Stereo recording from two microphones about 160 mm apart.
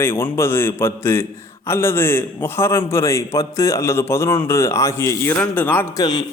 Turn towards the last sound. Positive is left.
turn(degrees=10)  # may be behind; listen again after turning